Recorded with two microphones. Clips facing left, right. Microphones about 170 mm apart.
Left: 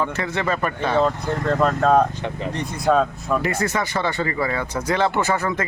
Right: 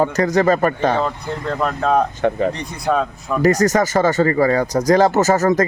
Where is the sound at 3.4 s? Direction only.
40° right (ahead or behind).